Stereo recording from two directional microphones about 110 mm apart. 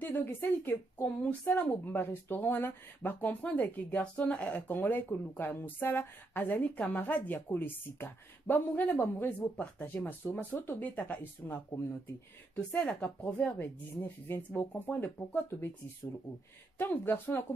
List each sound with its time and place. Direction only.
0.0 s speech: 15° left (ahead or behind)
16.7 s speech: 20° left (ahead or behind)